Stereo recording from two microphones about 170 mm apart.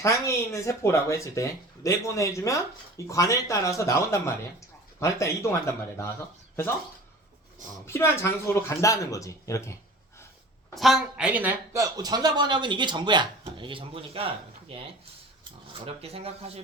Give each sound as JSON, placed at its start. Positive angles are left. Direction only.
{"t": 0.0, "sound": "speech", "side_deg": 15}
{"t": 7.9, "sound": "speech", "side_deg": 15}
{"t": 10.8, "sound": "speech", "side_deg": 0}
{"t": 11.8, "sound": "speech", "side_deg": -20}